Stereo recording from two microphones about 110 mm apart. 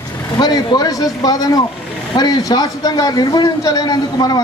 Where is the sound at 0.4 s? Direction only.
40° left (ahead or behind).